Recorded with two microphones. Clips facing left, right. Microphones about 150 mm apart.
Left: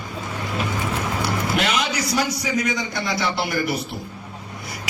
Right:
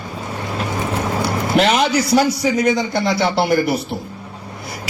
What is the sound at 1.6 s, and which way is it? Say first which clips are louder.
A man's voice: right 11 dB; 35° right (ahead or behind).